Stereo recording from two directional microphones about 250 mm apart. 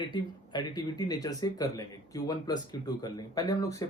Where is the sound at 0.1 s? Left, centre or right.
Centre.